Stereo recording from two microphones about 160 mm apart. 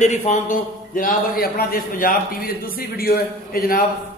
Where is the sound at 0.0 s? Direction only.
45° left (ahead or behind).